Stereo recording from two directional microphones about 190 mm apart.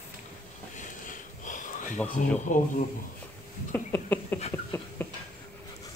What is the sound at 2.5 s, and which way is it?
Speech, 40° left (ahead or behind).